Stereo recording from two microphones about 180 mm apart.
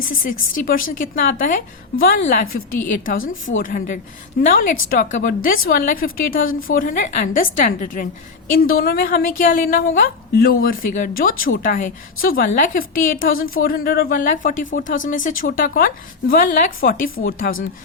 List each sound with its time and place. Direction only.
0.1 s a woman's voice: 50° left (ahead or behind)
3.6 s a woman's voice: 50° left (ahead or behind)